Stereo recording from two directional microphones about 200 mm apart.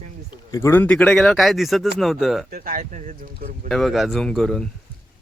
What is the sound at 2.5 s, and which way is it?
Speech, 45° right (ahead or behind).